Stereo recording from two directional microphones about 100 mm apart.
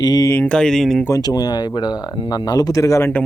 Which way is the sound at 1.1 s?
40° left (ahead or behind).